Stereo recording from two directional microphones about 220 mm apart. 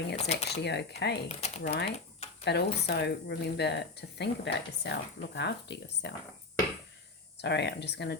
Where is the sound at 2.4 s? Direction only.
50° left (ahead or behind).